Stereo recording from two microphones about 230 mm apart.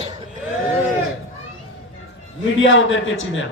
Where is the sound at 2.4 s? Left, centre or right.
Left.